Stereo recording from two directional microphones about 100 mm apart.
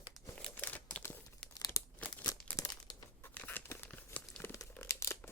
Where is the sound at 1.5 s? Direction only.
35° left (ahead or behind).